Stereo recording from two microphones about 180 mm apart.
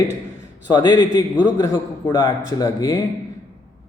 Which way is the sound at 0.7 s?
25° left (ahead or behind).